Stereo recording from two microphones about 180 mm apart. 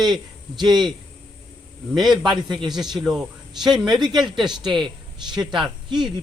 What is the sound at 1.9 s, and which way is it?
Speech, centre (ahead or behind).